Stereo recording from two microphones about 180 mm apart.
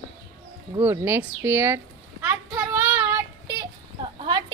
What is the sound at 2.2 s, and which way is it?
Child singing, 10° right (ahead or behind).